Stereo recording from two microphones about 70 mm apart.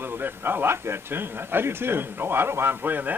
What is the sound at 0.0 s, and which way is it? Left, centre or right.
Speech, right.